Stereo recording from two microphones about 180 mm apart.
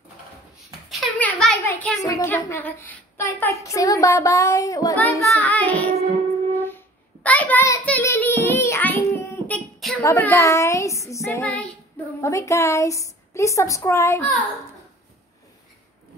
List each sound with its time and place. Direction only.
0.8 s a sound: 5° left (ahead or behind)
1.7 s a child's voice: 10° left (ahead or behind)
2.0 s a woman's voice: 20° left (ahead or behind)
6.5 s music: 10° left (ahead or behind)
7.2 s child singing: 10° left (ahead or behind)
9.8 s a sound: centre (ahead or behind)
10.0 s a woman's voice: 15° left (ahead or behind)